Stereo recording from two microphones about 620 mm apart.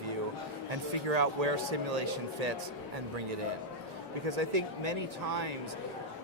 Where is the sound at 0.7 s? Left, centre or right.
Right.